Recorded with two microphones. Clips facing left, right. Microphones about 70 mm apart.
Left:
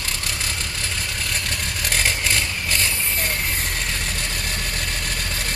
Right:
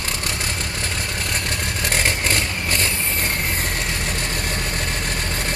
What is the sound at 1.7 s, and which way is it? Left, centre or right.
Vehicle, right.